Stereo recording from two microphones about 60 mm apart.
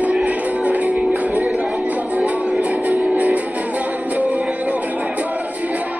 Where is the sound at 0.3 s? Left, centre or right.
Right.